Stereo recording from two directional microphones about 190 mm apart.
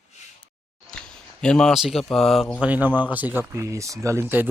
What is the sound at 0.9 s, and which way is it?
Speech, 5° left (ahead or behind).